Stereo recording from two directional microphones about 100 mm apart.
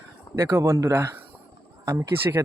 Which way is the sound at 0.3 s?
30° right (ahead or behind).